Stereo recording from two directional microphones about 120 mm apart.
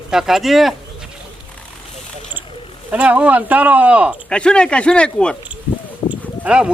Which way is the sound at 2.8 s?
10° right (ahead or behind).